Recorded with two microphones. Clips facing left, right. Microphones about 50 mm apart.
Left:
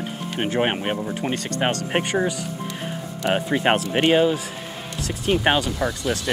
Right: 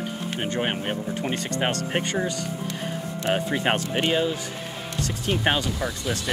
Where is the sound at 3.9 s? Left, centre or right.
Left.